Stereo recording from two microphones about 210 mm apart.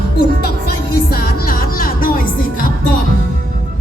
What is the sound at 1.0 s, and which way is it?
Music, 45° left (ahead or behind).